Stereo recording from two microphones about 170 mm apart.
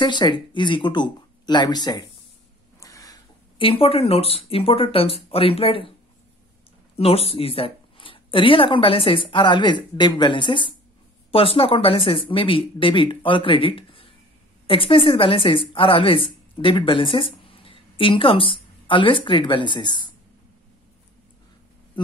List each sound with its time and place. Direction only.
0.0 s speech: 25° left (ahead or behind)
2.8 s a sound: 20° left (ahead or behind)
3.5 s speech: 35° left (ahead or behind)
7.0 s a woman's voice: 35° left (ahead or behind)